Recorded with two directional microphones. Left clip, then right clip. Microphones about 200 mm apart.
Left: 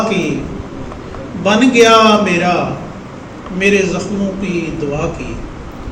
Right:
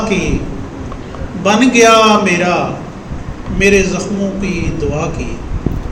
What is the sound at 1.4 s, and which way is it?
A man's voice, 60° right (ahead or behind).